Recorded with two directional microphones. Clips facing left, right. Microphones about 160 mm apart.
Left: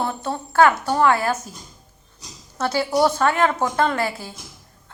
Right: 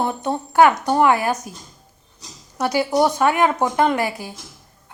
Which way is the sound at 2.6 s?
15° right (ahead or behind).